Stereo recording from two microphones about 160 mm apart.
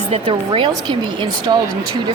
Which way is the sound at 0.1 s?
35° right (ahead or behind).